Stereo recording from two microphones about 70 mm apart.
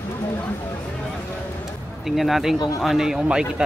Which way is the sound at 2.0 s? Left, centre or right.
Centre.